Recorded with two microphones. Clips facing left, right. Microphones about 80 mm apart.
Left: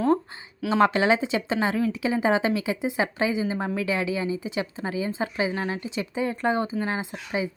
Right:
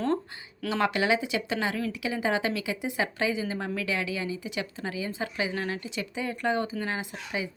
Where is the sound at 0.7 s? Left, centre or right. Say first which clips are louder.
Left 5 dB; left.